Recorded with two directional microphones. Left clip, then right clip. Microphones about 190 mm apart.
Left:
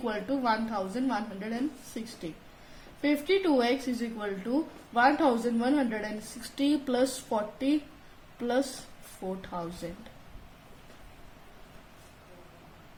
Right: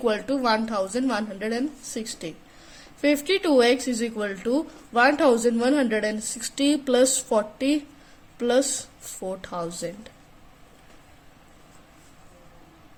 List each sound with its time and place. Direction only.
0.0 s a woman's voice: 55° right (ahead or behind)